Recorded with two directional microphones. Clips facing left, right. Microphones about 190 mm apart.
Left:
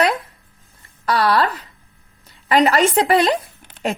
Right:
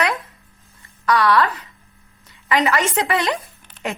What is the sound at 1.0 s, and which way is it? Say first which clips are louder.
A woman's voice: even; 35° left (ahead or behind).